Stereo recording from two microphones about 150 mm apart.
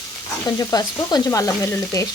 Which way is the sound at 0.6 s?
25° left (ahead or behind).